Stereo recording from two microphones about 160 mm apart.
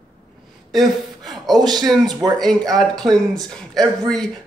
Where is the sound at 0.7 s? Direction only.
Centre (ahead or behind).